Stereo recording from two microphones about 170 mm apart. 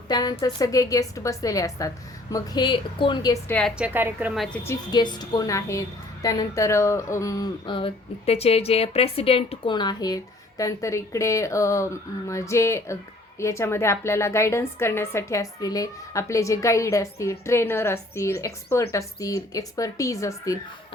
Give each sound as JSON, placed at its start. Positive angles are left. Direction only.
{"t": 0.1, "sound": "speech", "side_deg": 25}
{"t": 3.8, "sound": "a woman's voice", "side_deg": -10}
{"t": 4.6, "sound": "a woman's voice", "side_deg": 20}